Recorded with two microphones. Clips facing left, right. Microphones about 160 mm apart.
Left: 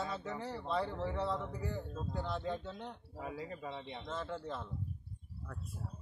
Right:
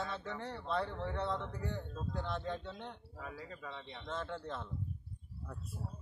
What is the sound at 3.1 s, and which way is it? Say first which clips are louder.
Speech: left 4 dB; 20° left (ahead or behind).